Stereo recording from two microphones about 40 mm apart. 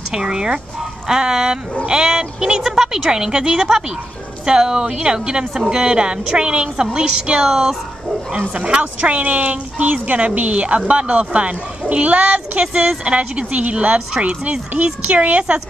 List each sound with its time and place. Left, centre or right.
0.1 s a woman's voice: centre
8.5 s a woman's voice: right